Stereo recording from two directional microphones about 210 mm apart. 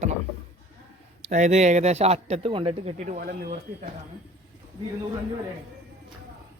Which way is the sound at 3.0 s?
40° right (ahead or behind).